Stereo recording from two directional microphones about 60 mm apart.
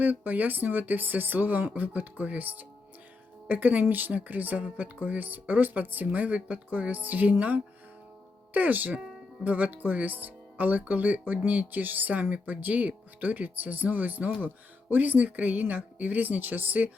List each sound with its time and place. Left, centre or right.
0.0 s speech: right